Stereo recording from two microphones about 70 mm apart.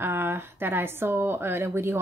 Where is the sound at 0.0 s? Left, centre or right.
Right.